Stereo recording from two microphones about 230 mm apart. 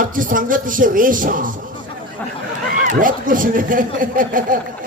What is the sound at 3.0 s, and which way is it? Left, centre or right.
A man's voice, right.